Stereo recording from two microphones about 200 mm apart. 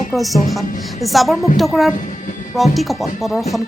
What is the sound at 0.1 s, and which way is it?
Speech, centre (ahead or behind).